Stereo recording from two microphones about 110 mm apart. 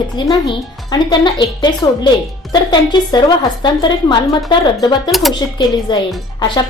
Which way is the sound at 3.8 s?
50° left (ahead or behind).